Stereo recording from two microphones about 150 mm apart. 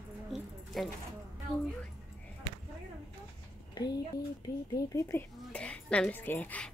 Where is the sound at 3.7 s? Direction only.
25° left (ahead or behind).